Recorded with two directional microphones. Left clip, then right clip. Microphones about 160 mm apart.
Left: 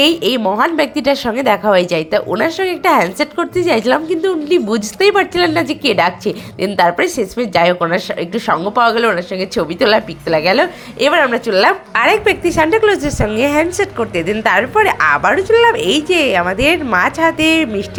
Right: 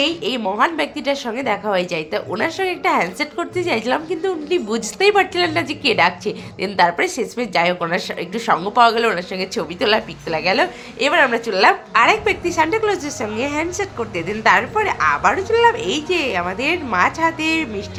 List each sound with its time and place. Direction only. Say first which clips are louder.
0.0 s a woman's voice: left 7 dB; 40° left (ahead or behind)